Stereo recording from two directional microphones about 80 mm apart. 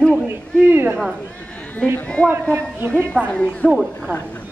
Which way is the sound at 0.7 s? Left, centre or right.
Right.